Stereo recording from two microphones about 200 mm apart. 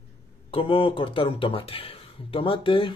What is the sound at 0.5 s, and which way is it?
Speech, 25° left (ahead or behind).